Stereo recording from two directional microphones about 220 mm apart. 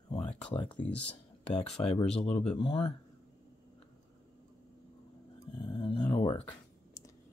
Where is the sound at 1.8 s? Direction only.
20° left (ahead or behind).